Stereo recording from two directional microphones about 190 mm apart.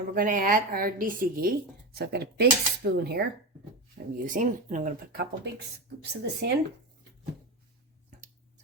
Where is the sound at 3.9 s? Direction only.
45° right (ahead or behind).